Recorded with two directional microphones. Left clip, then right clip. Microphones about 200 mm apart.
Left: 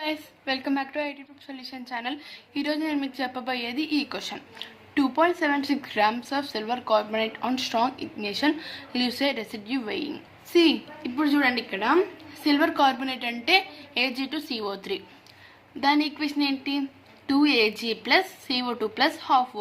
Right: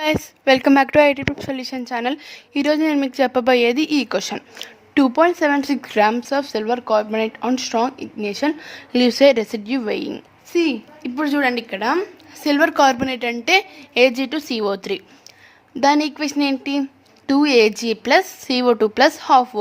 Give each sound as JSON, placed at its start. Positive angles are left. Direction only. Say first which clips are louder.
{"t": 0.0, "sound": "a woman's voice", "louder": "right 12 dB", "side_deg": -60}
{"t": 10.5, "sound": "a woman's voice", "louder": "right 1 dB", "side_deg": -30}
{"t": 11.0, "sound": "a woman's voice", "louder": "right 4 dB", "side_deg": -55}